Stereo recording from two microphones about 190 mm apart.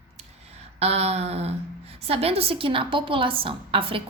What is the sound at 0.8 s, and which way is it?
A woman's voice, 35° right (ahead or behind).